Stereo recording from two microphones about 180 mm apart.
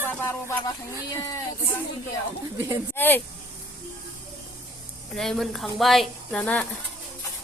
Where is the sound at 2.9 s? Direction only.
10° left (ahead or behind).